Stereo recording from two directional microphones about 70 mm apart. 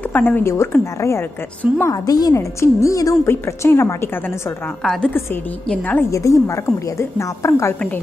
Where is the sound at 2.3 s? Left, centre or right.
Left.